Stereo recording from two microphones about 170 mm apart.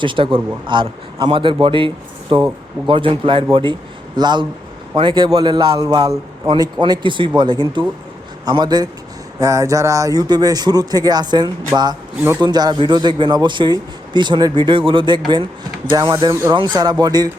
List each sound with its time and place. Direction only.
0.0 s a man's voice: 30° right (ahead or behind)
16.3 s a man's voice: 20° right (ahead or behind)